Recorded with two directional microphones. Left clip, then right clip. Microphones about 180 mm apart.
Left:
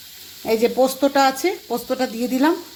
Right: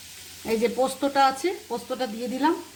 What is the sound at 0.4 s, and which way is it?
Speech, 40° left (ahead or behind).